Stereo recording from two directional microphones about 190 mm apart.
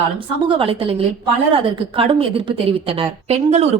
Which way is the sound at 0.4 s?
25° right (ahead or behind).